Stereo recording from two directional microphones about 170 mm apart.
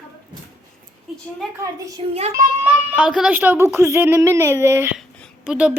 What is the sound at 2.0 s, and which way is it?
Speech, 30° right (ahead or behind).